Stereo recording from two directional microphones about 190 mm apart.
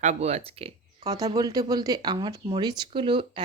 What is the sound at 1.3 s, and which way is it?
Speech, 20° right (ahead or behind).